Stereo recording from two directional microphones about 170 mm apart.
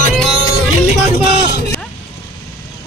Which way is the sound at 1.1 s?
70° left (ahead or behind).